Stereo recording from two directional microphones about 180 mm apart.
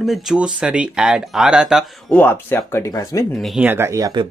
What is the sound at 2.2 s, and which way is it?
Speech, 10° left (ahead or behind).